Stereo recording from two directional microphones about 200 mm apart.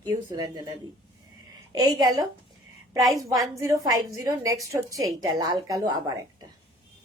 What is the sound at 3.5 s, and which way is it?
A woman's voice, 15° right (ahead or behind).